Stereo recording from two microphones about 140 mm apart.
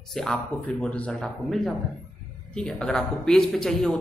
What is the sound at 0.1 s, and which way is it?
A woman's voice, centre (ahead or behind).